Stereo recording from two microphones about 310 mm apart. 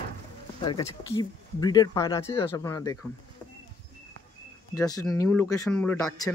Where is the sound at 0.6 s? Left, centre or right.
Centre.